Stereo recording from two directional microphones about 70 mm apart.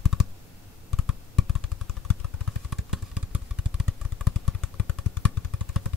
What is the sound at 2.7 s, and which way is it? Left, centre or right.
Vehicle, centre.